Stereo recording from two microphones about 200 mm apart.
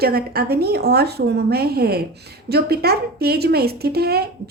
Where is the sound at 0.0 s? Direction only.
50° right (ahead or behind).